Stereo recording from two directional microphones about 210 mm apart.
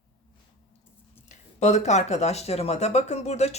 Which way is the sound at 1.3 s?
35° left (ahead or behind).